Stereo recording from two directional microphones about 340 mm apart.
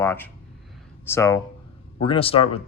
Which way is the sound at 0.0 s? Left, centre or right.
Centre.